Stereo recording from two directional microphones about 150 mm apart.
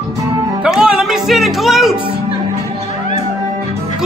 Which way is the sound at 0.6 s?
5° right (ahead or behind).